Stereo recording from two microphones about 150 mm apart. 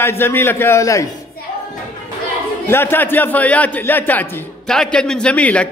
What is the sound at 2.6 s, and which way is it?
A man's voice, 15° left (ahead or behind).